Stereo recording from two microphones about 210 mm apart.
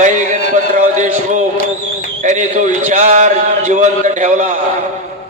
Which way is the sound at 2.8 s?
35° right (ahead or behind).